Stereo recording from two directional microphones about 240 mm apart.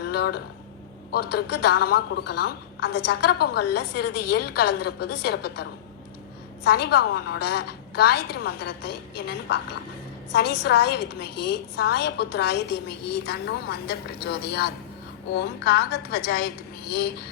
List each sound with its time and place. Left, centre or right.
0.1 s a sound: left
1.1 s a woman's voice: left
6.7 s a woman's voice: left
10.6 s a woman's voice: left